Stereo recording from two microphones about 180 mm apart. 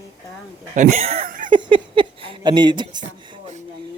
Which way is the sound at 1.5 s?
25° right (ahead or behind).